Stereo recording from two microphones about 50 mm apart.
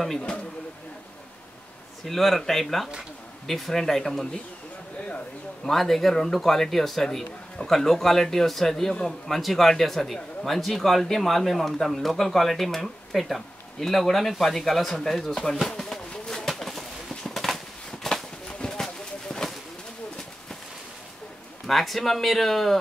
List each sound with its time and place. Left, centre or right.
2.0 s speech: centre
5.0 s speech: left
5.7 s speech: centre
15.7 s a sound: centre
16.4 s pigeon: centre
17.3 s a sound: centre
21.6 s speech: centre